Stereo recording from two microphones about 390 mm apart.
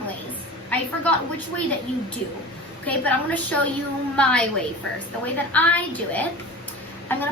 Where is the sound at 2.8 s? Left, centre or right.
Centre.